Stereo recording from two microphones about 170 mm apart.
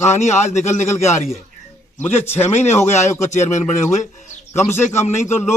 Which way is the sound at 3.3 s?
45° left (ahead or behind).